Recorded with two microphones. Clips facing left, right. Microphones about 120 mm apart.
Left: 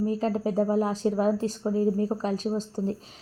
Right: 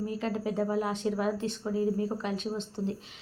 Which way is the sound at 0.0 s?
35° left (ahead or behind).